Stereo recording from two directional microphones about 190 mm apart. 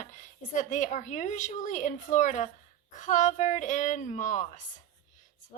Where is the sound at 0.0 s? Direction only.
40° left (ahead or behind).